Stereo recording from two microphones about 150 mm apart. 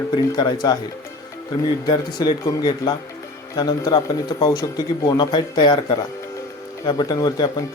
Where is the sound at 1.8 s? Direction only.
30° left (ahead or behind).